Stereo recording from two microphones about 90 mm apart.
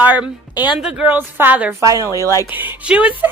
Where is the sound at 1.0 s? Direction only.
20° right (ahead or behind).